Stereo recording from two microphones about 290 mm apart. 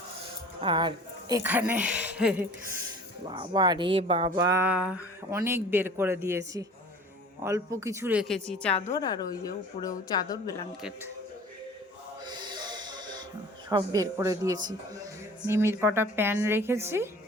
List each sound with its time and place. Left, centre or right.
0.6 s speech: centre
3.3 s speech: centre
8.9 s a woman's voice: centre
12.2 s snort: centre
13.7 s speech: centre